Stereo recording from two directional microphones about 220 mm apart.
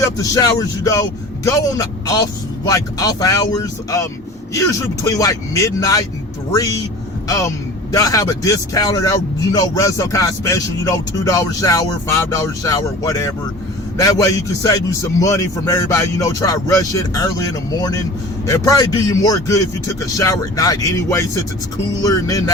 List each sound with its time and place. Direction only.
0.0 s speech: 15° left (ahead or behind)